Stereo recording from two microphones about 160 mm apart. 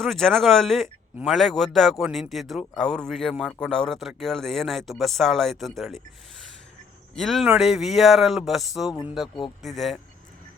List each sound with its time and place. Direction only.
0.0 s speech: 5° left (ahead or behind)
7.2 s speech: centre (ahead or behind)